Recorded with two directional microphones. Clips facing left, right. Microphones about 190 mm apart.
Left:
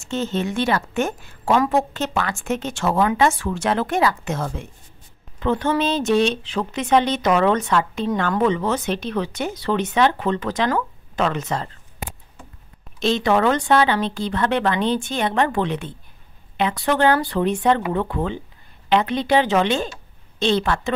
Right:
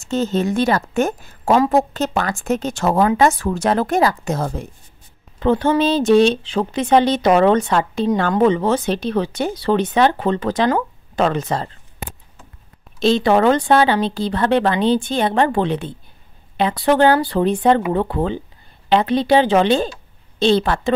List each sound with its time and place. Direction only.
0.1 s speech: 40° right (ahead or behind)
13.0 s speech: 35° right (ahead or behind)